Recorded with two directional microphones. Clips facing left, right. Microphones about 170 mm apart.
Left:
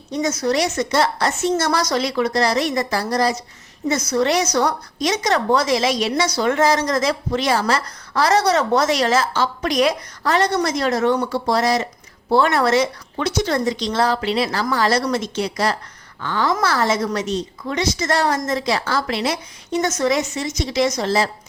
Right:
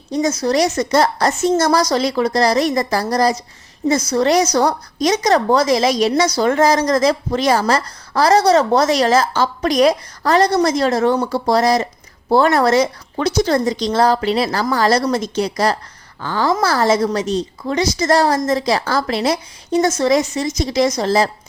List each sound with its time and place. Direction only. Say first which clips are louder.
0.1 s a woman's voice: right 3 dB; 35° right (ahead or behind)